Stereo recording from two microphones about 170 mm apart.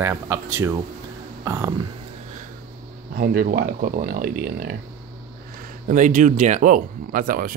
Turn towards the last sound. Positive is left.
turn(degrees=-55)  # may be behind; listen again after turning